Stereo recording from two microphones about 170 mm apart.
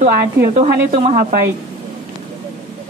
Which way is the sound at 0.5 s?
40° right (ahead or behind).